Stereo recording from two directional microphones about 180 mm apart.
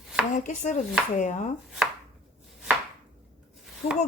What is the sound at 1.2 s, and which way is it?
Speech, 45° left (ahead or behind).